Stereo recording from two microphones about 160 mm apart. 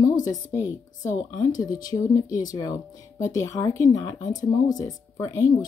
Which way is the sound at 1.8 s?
20° left (ahead or behind).